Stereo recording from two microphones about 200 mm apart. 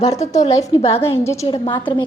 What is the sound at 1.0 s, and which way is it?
Speech, 15° left (ahead or behind).